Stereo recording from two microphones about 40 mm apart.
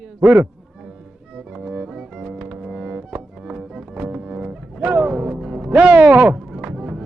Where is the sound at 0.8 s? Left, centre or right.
Centre.